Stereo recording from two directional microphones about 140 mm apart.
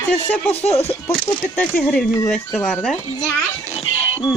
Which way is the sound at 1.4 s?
10° left (ahead or behind).